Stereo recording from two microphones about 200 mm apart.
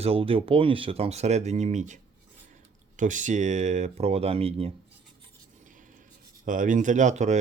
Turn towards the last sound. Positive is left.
turn(degrees=-35)  # may be behind; listen again after turning